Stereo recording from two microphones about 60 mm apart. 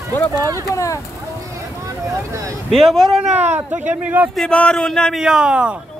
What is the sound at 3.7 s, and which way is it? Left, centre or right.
Speech, right.